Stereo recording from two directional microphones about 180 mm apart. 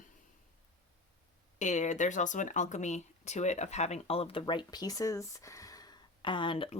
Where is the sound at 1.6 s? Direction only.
40° left (ahead or behind).